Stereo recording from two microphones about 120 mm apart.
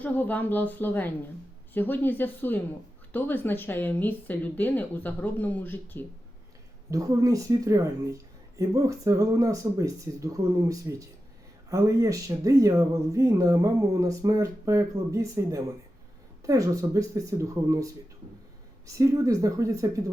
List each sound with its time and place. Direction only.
0.0 s speech: 15° left (ahead or behind)
6.9 s speech: 30° right (ahead or behind)
18.9 s speech: 25° right (ahead or behind)